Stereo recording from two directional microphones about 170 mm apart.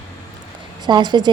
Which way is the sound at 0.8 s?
25° right (ahead or behind).